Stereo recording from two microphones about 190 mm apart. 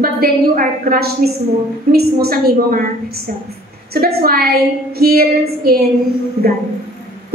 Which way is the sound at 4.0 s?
55° right (ahead or behind).